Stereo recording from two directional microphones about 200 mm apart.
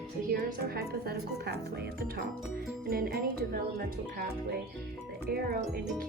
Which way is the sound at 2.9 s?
50° right (ahead or behind).